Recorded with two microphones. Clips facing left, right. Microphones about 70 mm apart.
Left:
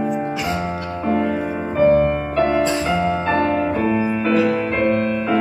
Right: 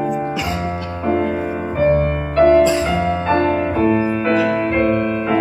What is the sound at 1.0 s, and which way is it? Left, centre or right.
Music, right.